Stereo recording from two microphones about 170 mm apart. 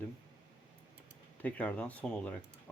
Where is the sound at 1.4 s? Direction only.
10° left (ahead or behind).